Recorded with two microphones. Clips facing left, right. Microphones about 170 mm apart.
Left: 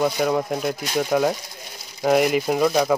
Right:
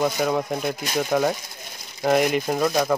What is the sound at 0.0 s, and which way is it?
Speech, centre (ahead or behind).